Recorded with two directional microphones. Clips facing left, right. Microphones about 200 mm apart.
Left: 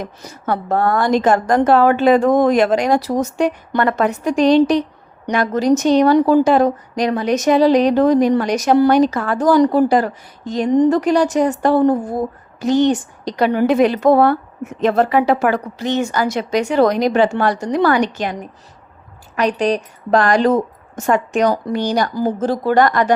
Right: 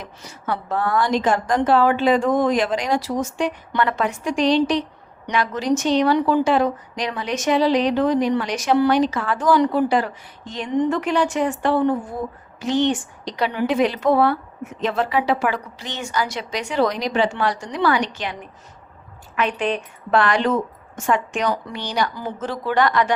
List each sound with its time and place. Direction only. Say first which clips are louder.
0.0 s a woman's voice: left 6 dB; 45° left (ahead or behind)